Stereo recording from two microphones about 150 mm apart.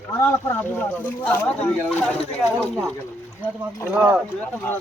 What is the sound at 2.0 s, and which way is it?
Speech, centre (ahead or behind).